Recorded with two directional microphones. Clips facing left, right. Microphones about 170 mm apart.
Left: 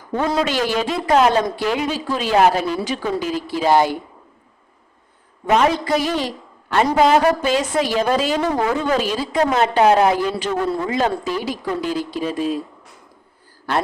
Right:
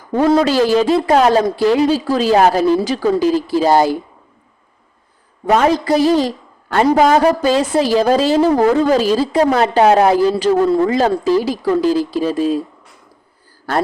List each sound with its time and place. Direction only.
0.2 s a man's voice: 35° right (ahead or behind)
5.5 s a man's voice: 40° right (ahead or behind)